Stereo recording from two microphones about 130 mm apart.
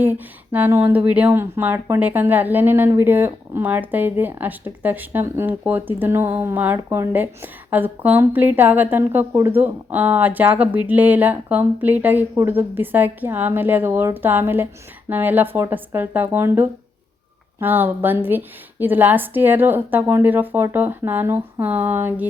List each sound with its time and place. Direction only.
0.0 s speech: 15° right (ahead or behind)